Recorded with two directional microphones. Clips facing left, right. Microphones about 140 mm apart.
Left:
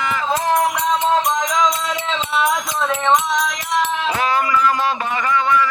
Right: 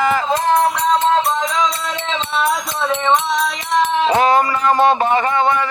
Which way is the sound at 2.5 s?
Centre (ahead or behind).